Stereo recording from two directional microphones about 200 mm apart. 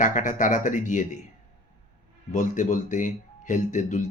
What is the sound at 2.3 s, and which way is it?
Speech, 40° left (ahead or behind).